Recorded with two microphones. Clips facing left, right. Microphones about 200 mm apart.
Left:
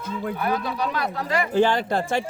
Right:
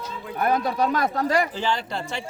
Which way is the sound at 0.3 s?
45° right (ahead or behind).